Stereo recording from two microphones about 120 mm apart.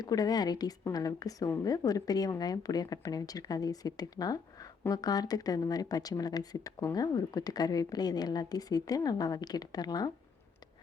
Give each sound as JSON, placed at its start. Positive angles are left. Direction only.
{"t": 0.0, "sound": "speech", "side_deg": 30}